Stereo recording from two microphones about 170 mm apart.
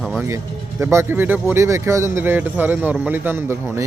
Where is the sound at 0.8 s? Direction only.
15° right (ahead or behind).